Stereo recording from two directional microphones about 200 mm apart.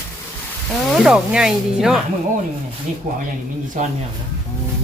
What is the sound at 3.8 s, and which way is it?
Speech, 40° right (ahead or behind).